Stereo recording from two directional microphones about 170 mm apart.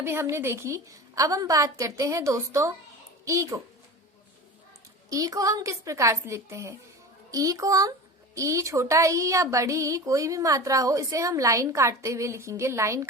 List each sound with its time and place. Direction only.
0.0 s a woman's voice: 15° right (ahead or behind)
5.0 s a woman's voice: 20° right (ahead or behind)